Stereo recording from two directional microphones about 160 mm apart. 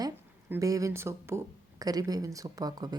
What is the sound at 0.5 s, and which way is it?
A woman's voice, 20° right (ahead or behind).